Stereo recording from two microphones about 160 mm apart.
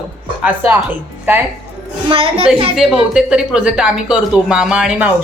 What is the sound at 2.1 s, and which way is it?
Speech, 35° right (ahead or behind).